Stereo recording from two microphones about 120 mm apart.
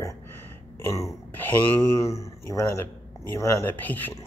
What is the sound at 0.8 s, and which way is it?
Speech, 25° left (ahead or behind).